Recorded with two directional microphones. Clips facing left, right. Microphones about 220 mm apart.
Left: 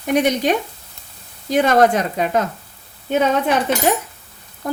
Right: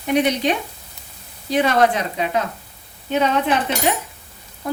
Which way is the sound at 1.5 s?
45° left (ahead or behind).